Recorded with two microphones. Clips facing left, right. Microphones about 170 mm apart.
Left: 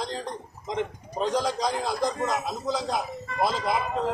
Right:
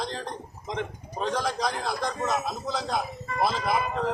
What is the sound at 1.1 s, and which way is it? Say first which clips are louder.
A man's voice: left 2 dB; 15° left (ahead or behind).